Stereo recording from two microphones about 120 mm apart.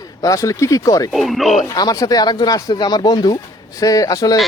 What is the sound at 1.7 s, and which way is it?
Speech, 30° left (ahead or behind).